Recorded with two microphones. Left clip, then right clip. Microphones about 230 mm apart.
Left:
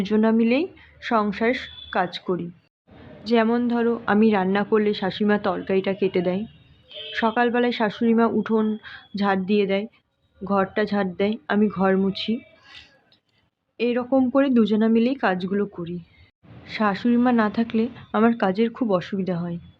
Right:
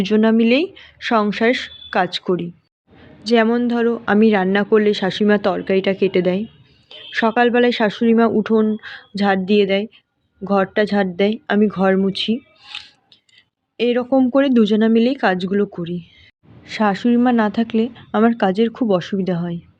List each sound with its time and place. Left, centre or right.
0.0 s a woman's voice: right
13.7 s a woman's voice: right